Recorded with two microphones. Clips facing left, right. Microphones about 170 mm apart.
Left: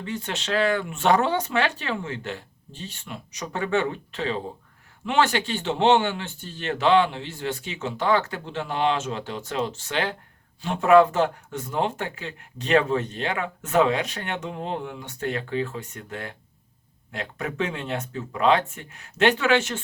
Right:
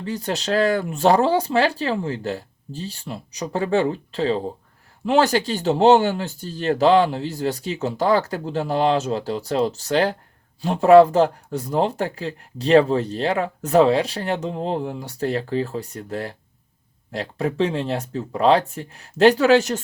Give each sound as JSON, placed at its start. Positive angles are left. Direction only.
{"t": 0.0, "sound": "speech", "side_deg": -35}